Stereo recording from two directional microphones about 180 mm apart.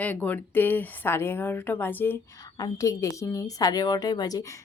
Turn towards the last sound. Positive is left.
turn(degrees=20)  # may be behind; listen again after turning